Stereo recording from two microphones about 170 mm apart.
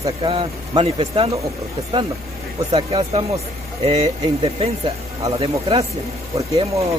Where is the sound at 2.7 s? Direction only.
35° right (ahead or behind).